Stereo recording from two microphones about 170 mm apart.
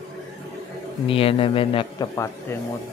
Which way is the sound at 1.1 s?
35° left (ahead or behind).